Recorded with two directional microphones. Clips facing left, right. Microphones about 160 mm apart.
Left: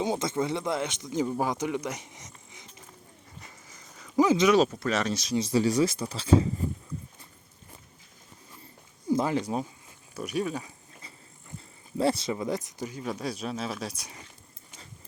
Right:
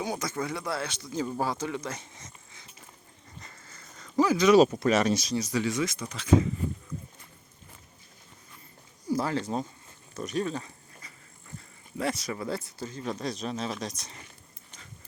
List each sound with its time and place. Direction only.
0.0 s speech: 25° left (ahead or behind)
3.4 s sniff: 10° left (ahead or behind)
4.5 s speech: 15° right (ahead or behind)
5.4 s speech: 30° left (ahead or behind)
9.0 s speech: 20° left (ahead or behind)
11.9 s speech: 30° left (ahead or behind); by 14.3 s 10° left (ahead or behind)